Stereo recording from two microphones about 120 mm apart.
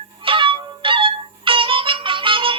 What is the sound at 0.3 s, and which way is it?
Music, 45° right (ahead or behind).